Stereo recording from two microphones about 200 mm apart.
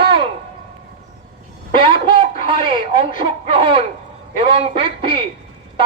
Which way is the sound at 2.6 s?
45° left (ahead or behind).